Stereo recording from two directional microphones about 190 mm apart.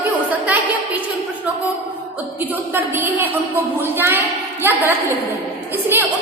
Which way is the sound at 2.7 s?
10° right (ahead or behind).